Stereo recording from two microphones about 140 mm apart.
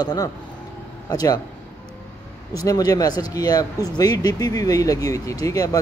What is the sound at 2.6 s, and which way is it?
Speech, 25° left (ahead or behind).